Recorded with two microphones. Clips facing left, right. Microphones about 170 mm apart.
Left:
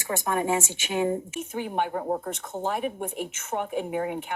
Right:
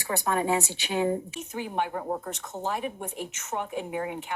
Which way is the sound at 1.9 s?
30° left (ahead or behind).